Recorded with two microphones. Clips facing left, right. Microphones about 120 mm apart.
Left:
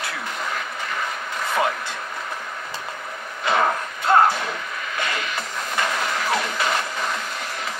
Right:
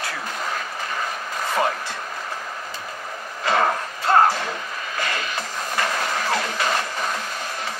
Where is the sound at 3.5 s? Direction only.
35° right (ahead or behind).